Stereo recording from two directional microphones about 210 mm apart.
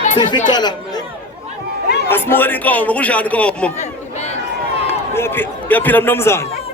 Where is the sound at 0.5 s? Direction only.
20° left (ahead or behind).